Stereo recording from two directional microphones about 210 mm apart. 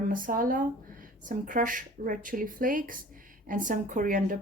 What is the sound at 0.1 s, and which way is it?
Speech, 40° right (ahead or behind).